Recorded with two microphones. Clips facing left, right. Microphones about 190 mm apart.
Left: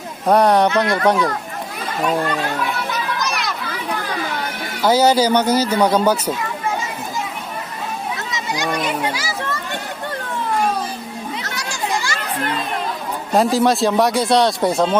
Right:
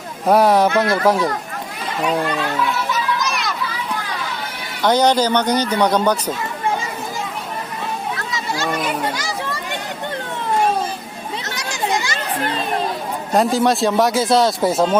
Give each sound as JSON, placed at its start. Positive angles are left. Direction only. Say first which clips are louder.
{"t": 0.3, "sound": "a man's voice", "louder": "even", "side_deg": -5}
{"t": 3.2, "sound": "children playing", "louder": "even", "side_deg": 0}
{"t": 4.8, "sound": "speech", "louder": "left 1 dB", "side_deg": 5}
{"t": 8.7, "sound": "children playing", "louder": "left 2 dB", "side_deg": 0}
{"t": 11.4, "sound": "children playing", "louder": "right 5 dB", "side_deg": -20}
{"t": 13.3, "sound": "a man's voice", "louder": "left 1 dB", "side_deg": 0}